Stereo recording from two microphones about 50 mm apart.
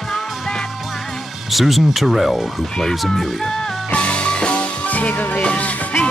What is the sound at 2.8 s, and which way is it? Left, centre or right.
Speech, centre.